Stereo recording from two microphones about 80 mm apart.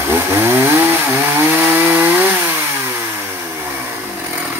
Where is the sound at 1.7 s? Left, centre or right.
Right.